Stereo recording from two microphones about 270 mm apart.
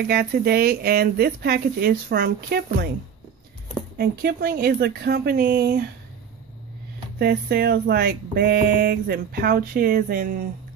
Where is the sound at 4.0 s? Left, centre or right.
Right.